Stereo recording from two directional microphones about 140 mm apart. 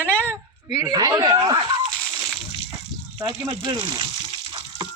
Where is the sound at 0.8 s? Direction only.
25° right (ahead or behind).